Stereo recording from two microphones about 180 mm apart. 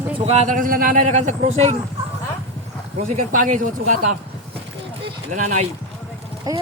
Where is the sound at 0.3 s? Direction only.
40° right (ahead or behind).